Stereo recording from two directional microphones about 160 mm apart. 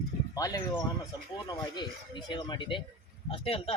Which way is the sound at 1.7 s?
25° left (ahead or behind).